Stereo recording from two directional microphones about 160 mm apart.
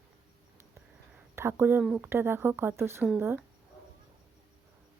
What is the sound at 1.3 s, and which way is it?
Speech, 15° right (ahead or behind).